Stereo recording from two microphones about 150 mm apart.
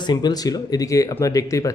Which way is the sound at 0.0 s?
30° left (ahead or behind).